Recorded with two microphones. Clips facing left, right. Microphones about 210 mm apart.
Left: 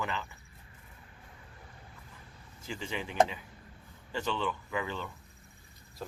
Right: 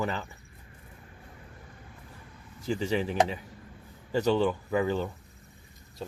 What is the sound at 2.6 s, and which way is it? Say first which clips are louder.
Speech: right 10 dB; 40° right (ahead or behind).